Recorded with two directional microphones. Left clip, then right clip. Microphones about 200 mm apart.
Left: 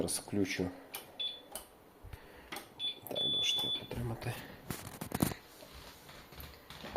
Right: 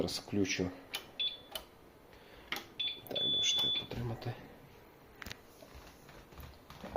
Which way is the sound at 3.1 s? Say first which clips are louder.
Even; 15° left (ahead or behind).